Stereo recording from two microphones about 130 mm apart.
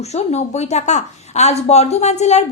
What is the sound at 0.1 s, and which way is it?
Speech, 55° left (ahead or behind).